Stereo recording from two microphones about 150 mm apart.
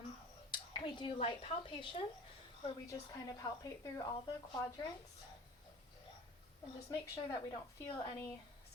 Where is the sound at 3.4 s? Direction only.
25° left (ahead or behind).